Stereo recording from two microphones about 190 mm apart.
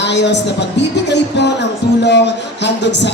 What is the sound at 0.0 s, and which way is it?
Speech, 65° left (ahead or behind).